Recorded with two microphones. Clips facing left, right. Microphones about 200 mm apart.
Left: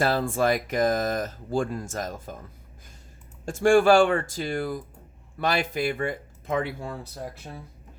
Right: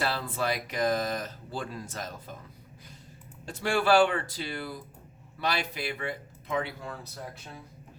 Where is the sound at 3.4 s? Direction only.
45° left (ahead or behind).